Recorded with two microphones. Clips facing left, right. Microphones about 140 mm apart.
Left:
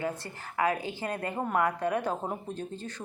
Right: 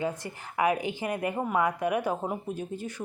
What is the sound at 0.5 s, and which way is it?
Speech, 15° right (ahead or behind).